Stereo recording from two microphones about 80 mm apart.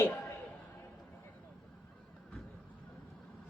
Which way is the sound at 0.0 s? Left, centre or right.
Left.